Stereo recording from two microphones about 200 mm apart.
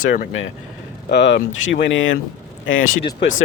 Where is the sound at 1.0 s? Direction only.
60° left (ahead or behind).